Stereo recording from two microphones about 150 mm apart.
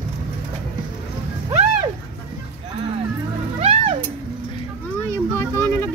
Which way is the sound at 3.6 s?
40° right (ahead or behind).